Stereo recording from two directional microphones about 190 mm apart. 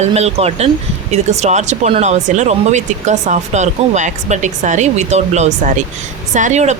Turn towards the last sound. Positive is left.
turn(degrees=-40)  # may be behind; listen again after turning